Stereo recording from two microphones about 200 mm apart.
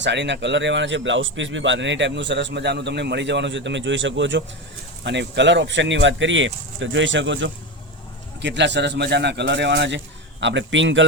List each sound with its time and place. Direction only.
0.0 s a man's voice: 60° right (ahead or behind)